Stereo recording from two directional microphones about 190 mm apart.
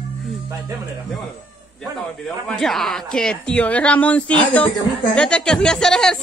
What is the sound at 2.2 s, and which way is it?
Speech, 5° left (ahead or behind).